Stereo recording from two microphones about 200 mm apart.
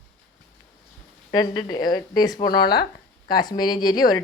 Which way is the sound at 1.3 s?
20° left (ahead or behind).